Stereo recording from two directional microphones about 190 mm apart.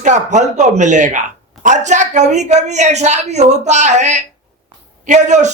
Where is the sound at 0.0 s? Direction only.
40° right (ahead or behind).